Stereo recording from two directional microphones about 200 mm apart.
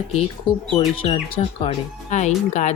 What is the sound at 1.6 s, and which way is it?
Speech, 35° left (ahead or behind).